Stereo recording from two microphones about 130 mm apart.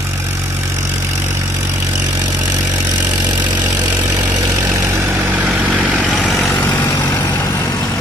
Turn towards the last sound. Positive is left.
turn(degrees=25)  # may be behind; listen again after turning